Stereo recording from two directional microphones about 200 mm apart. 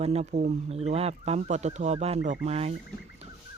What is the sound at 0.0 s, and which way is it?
Speech, 30° right (ahead or behind).